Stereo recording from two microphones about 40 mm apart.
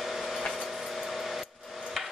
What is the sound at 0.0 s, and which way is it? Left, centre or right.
Vehicle, centre.